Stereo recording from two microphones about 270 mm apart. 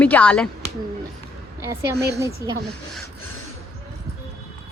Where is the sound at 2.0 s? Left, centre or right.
Centre.